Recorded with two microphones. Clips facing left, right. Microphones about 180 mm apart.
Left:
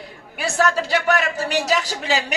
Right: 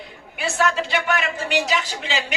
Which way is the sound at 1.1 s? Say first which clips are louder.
Left 3 dB; 40° left (ahead or behind).